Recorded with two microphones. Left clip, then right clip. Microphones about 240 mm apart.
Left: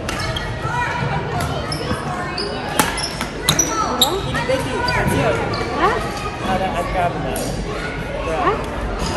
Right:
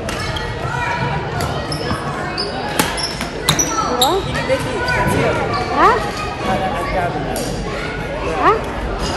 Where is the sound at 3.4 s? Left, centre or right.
Centre.